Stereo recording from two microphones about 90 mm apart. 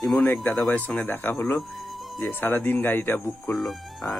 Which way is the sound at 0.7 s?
15° left (ahead or behind).